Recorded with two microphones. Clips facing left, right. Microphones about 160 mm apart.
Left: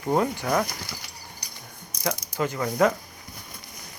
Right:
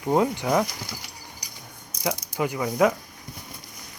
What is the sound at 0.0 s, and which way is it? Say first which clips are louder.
Speech: right 2 dB; 15° right (ahead or behind).